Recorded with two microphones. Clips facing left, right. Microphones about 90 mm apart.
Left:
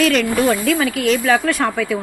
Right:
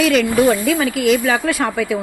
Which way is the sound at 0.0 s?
Centre (ahead or behind).